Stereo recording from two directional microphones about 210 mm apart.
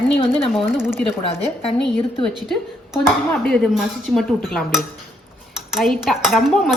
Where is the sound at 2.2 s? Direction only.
Centre (ahead or behind).